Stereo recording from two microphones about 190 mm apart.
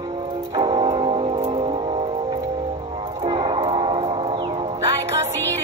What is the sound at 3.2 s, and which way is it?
Music, 25° right (ahead or behind).